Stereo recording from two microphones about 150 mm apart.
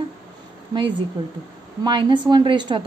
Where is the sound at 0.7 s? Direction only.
35° right (ahead or behind).